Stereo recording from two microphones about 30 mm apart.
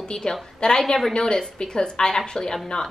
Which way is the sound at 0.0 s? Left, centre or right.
Centre.